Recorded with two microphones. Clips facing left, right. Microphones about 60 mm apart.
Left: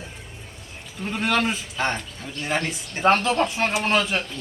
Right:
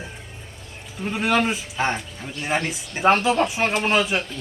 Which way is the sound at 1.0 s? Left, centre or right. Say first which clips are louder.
Right 2 dB; centre.